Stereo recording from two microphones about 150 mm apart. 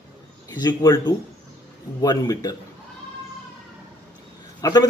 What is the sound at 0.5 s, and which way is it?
Speech, 25° left (ahead or behind).